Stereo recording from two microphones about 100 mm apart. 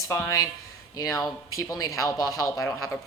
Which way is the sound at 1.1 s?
30° left (ahead or behind).